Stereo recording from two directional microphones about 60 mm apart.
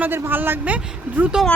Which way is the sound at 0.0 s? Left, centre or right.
Right.